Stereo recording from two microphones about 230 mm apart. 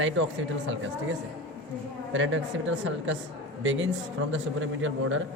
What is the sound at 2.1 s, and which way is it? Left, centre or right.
A man's voice, right.